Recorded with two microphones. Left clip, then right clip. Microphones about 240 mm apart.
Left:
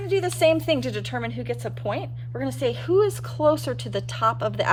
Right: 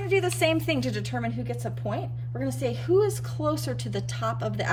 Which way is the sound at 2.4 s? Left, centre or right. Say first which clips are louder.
Left 4 dB; centre.